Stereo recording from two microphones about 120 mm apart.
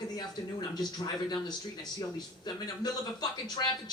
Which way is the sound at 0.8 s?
35° left (ahead or behind).